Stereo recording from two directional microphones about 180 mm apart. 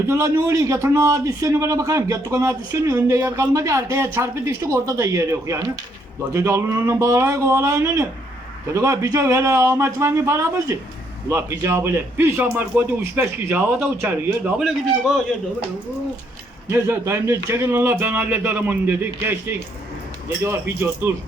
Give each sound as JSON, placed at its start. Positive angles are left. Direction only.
{"t": 0.1, "sound": "a man's voice", "side_deg": -15}
{"t": 16.6, "sound": "a man's voice", "side_deg": -15}